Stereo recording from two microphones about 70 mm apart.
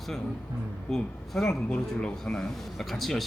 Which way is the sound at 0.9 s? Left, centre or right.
Centre.